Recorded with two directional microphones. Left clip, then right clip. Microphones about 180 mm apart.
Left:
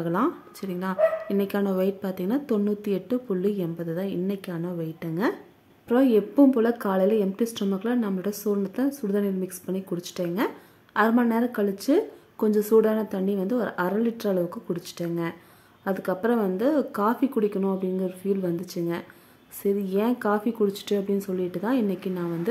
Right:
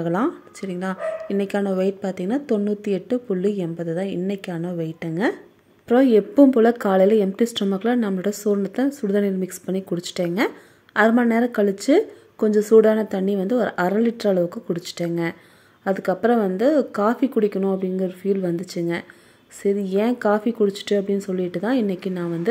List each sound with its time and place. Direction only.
0.0 s a woman's voice: 15° right (ahead or behind)